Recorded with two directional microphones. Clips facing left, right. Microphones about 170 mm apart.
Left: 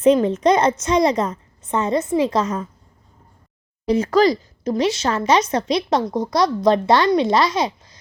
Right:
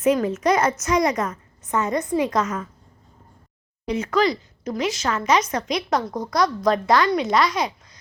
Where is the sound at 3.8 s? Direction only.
35° left (ahead or behind).